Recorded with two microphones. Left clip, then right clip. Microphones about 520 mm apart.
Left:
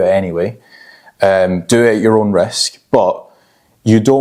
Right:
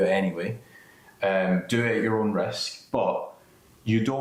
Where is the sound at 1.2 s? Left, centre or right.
Left.